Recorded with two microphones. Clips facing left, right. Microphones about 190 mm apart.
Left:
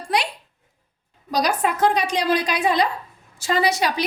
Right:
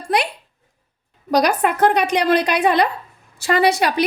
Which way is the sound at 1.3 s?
60° right (ahead or behind).